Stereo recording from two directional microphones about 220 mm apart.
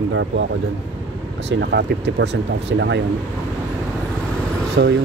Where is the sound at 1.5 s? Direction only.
50° right (ahead or behind).